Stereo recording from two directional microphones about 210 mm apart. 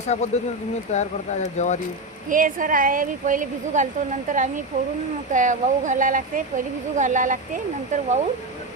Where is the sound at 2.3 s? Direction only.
40° right (ahead or behind).